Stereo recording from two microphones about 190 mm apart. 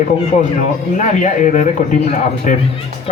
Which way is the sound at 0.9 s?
40° left (ahead or behind).